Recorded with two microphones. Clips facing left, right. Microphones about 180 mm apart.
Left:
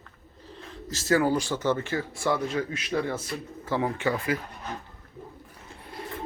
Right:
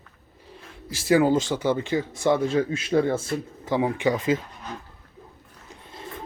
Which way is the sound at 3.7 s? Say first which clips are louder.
Right 4 dB; 15° right (ahead or behind).